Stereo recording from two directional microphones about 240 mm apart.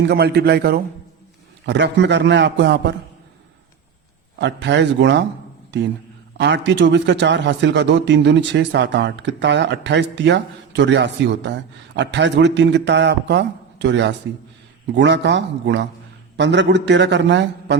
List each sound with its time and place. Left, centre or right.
0.0 s a man's voice: right
4.4 s a man's voice: right
6.3 s a man's voice: right